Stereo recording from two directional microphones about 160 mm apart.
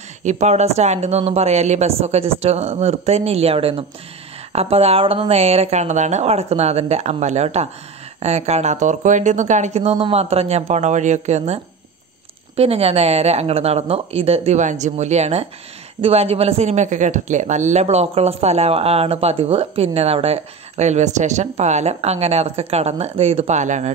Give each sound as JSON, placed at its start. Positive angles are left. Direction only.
{"t": 0.2, "sound": "speech", "side_deg": -45}